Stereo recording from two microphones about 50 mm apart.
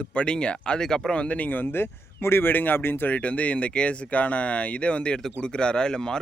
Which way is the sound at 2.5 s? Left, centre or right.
Left.